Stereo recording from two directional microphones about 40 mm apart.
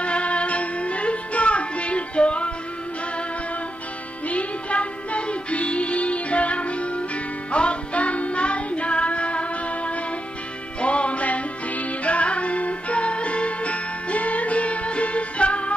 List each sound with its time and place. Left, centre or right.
0.0 s music: left
4.3 s music: left